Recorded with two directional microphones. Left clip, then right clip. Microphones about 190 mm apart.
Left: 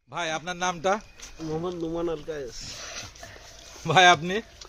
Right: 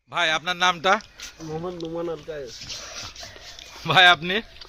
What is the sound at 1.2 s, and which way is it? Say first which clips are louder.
Speech: even; 20° left (ahead or behind).